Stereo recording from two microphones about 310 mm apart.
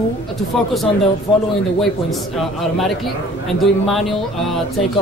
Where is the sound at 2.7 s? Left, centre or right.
Centre.